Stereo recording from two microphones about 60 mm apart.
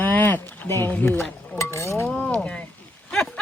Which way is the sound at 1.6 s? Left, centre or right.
Left.